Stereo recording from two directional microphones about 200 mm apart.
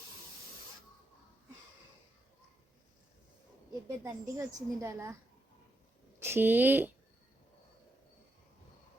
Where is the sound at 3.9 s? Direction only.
15° right (ahead or behind).